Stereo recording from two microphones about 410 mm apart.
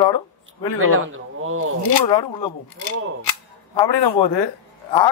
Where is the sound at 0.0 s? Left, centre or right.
Left.